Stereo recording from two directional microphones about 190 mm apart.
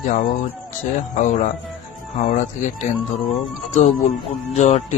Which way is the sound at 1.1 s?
40° left (ahead or behind).